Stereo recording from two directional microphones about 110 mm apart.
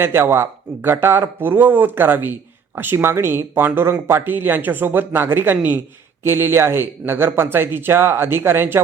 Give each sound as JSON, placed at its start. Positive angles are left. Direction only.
{"t": 0.0, "sound": "speech", "side_deg": -20}